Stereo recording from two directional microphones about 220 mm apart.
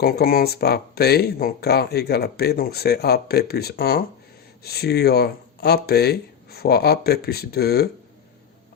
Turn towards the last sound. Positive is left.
turn(degrees=45)  # may be behind; listen again after turning